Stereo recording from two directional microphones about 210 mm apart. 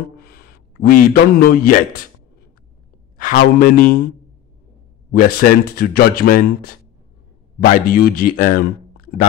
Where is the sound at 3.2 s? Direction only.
45° left (ahead or behind).